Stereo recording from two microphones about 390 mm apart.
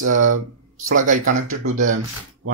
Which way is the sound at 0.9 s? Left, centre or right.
Centre.